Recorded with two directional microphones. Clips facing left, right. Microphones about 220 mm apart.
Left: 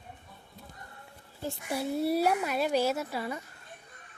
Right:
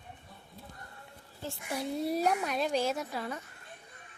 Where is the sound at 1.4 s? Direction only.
15° left (ahead or behind).